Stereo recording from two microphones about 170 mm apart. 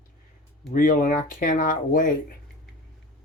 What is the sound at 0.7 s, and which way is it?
Speech, 50° left (ahead or behind).